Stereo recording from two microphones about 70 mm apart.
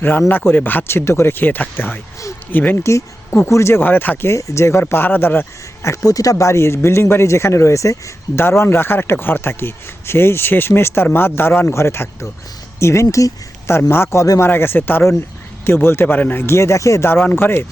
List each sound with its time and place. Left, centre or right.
0.3 s speech: left
3.5 s a man's voice: left
4.3 s a man's voice: left
5.8 s speech: left
8.4 s a man's voice: left
17.3 s a man's voice: left